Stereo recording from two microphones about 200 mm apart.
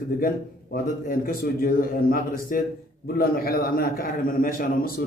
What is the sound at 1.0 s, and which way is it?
A man's voice, 45° left (ahead or behind).